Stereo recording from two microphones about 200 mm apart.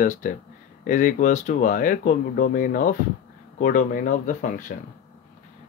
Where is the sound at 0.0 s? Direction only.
40° left (ahead or behind).